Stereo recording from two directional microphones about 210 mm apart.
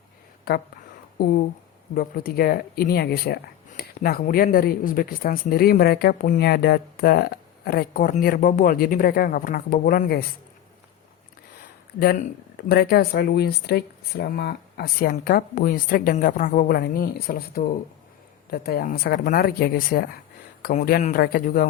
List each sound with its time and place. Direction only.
0.5 s speech: 45° left (ahead or behind)
11.9 s speech: 45° left (ahead or behind)